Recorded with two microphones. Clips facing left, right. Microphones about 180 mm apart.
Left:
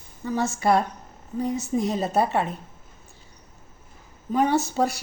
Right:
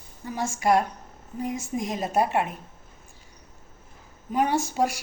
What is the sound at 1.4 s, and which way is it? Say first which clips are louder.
Speech: left 4 dB; 35° left (ahead or behind).